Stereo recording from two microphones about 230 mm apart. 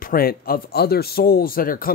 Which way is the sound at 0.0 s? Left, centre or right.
Left.